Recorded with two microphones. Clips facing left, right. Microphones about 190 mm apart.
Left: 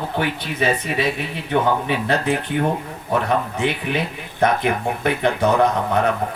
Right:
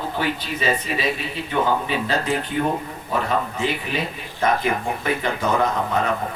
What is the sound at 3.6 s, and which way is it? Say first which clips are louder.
A man's voice: left 3 dB; 65° left (ahead or behind).